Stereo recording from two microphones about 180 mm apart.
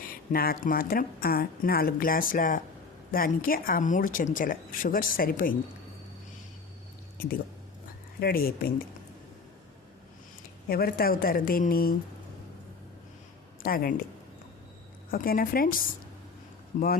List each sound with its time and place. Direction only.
0.1 s a woman's voice: 55° left (ahead or behind)
8.2 s speech: 55° left (ahead or behind)
10.7 s speech: 55° left (ahead or behind)
13.6 s speech: 55° left (ahead or behind)
15.1 s a woman's voice: 55° left (ahead or behind)